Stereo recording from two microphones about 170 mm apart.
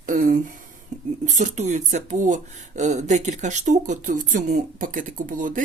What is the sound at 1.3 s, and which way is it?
Speech, 45° right (ahead or behind).